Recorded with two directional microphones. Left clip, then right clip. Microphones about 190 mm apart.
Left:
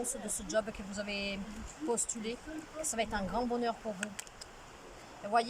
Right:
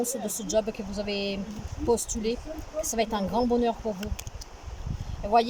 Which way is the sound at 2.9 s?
20° right (ahead or behind).